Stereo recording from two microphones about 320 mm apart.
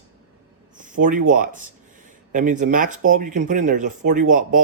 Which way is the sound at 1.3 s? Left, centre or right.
Right.